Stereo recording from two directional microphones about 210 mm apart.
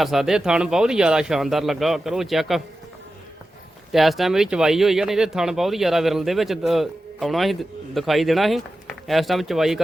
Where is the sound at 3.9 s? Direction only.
Centre (ahead or behind).